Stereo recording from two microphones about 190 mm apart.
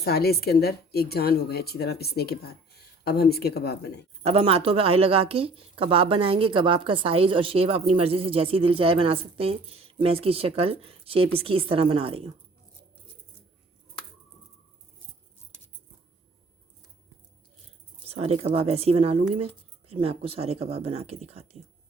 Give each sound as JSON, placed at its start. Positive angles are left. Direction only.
{"t": 0.0, "sound": "speech", "side_deg": 55}
{"t": 4.2, "sound": "a woman's voice", "side_deg": -30}
{"t": 18.1, "sound": "speech", "side_deg": -30}